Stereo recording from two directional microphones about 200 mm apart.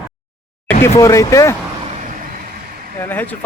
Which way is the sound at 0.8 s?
15° left (ahead or behind).